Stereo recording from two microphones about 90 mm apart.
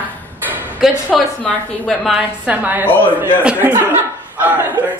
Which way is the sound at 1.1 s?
Centre (ahead or behind).